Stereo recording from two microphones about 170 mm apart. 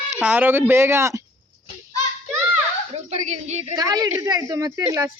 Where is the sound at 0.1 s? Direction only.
10° right (ahead or behind).